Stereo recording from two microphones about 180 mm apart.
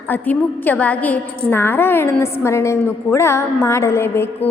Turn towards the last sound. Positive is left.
turn(degrees=15)  # may be behind; listen again after turning